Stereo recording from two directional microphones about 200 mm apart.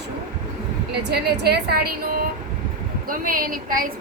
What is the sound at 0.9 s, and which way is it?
A woman's voice, 55° right (ahead or behind).